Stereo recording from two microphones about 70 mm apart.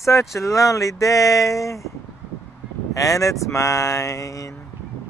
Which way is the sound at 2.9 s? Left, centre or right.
Left.